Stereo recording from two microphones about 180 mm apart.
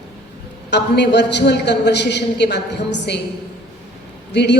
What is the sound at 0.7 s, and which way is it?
A woman's voice, 70° left (ahead or behind).